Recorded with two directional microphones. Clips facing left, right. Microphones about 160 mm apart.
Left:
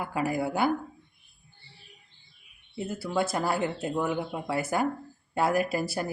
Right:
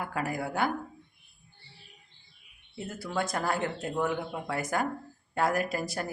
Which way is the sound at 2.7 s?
10° left (ahead or behind).